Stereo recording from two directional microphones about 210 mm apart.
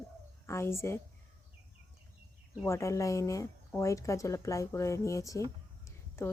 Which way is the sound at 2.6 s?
15° left (ahead or behind).